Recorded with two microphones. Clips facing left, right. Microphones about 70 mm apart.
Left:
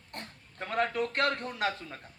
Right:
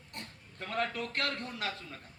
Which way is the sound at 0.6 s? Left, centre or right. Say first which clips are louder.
Left 5 dB; left.